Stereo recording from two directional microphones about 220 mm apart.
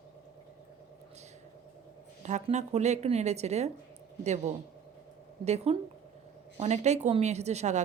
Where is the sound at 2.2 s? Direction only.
30° right (ahead or behind).